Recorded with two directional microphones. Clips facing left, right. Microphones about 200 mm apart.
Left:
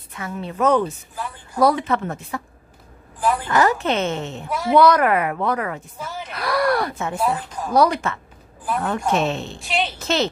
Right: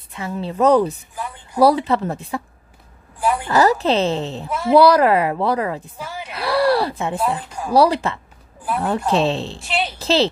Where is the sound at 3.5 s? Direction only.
35° right (ahead or behind).